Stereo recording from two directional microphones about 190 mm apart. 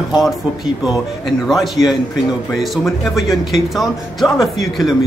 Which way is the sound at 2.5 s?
Centre (ahead or behind).